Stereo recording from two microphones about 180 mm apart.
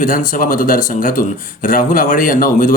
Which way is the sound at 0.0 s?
45° left (ahead or behind).